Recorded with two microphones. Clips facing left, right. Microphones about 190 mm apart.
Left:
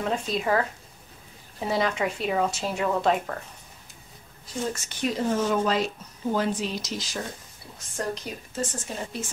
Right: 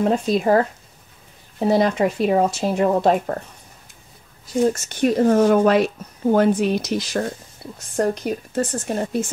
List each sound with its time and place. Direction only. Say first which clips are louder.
0.0 s speech: right 9 dB; 45° right (ahead or behind)
4.7 s a woman's voice: right 10 dB; 55° right (ahead or behind)